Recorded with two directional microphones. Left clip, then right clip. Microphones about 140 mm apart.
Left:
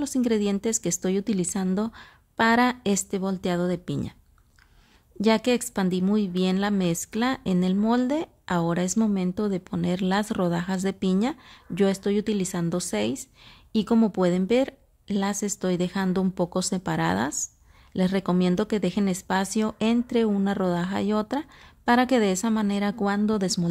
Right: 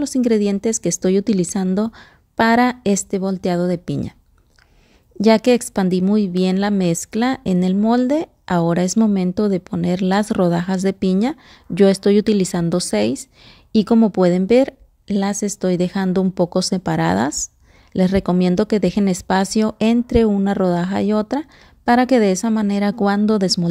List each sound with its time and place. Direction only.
0.0 s speech: 25° right (ahead or behind)
5.2 s a woman's voice: 35° right (ahead or behind)